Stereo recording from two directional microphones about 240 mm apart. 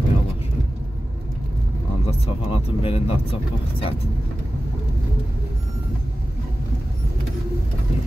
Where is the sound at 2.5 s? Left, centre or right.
Left.